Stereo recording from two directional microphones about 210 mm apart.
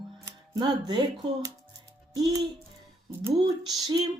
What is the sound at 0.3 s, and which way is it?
Speech, 20° right (ahead or behind).